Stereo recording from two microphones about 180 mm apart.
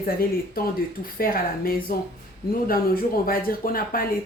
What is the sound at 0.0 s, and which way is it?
Speech, 55° left (ahead or behind).